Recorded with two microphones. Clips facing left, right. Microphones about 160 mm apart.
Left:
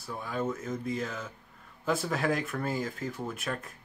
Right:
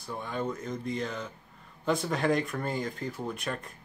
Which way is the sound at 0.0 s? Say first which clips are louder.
Even; 5° left (ahead or behind).